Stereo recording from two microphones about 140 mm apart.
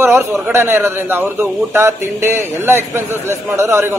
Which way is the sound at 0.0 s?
15° right (ahead or behind).